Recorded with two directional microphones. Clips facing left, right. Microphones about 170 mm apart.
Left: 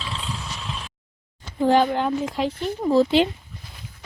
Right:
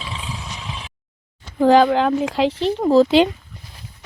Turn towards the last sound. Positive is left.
turn(degrees=-90)